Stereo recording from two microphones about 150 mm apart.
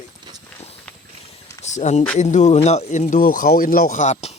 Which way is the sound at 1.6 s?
50° left (ahead or behind).